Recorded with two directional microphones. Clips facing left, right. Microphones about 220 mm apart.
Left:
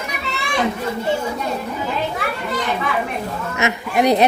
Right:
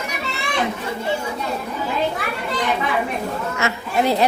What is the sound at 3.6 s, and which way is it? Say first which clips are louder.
Speech: left 4 dB; 20° left (ahead or behind).